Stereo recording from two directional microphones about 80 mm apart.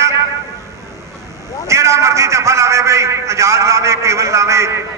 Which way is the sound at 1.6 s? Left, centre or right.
Right.